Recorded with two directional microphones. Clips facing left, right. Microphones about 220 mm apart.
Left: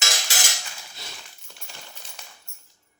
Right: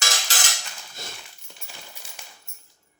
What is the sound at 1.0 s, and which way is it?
Dog, 50° right (ahead or behind).